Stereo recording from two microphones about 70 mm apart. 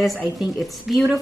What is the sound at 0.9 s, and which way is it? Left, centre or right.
Speech, centre.